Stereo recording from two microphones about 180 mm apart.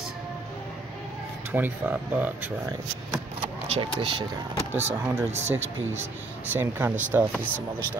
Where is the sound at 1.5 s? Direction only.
10° right (ahead or behind).